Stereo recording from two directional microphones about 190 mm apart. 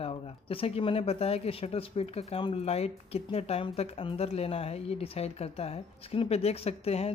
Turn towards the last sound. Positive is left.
turn(degrees=30)  # may be behind; listen again after turning